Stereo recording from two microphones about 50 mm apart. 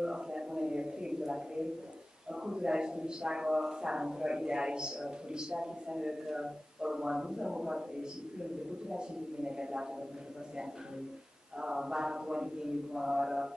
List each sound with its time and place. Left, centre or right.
0.0 s a sound: centre
2.4 s a man's voice: centre
11.6 s a man's voice: centre